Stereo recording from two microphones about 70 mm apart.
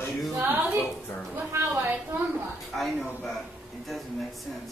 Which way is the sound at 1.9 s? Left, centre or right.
Right.